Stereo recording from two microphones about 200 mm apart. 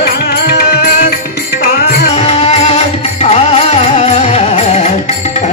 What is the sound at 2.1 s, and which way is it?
Music, 30° left (ahead or behind).